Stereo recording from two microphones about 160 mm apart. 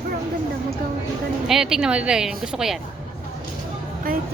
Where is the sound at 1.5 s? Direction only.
5° right (ahead or behind).